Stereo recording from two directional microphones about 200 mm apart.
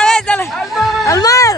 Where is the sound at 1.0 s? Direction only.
15° left (ahead or behind).